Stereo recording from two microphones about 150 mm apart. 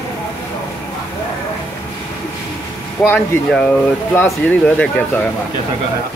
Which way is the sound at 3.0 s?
15° left (ahead or behind).